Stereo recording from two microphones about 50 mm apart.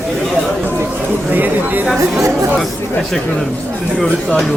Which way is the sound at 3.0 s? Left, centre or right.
Centre.